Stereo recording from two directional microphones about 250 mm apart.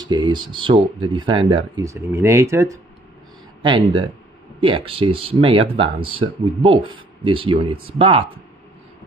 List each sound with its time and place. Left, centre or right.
0.0 s speech: centre